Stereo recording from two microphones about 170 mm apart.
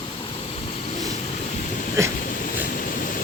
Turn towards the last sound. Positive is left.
turn(degrees=55)  # may be behind; listen again after turning